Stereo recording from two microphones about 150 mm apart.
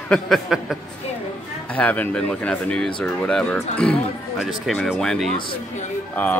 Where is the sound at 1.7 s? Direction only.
10° left (ahead or behind).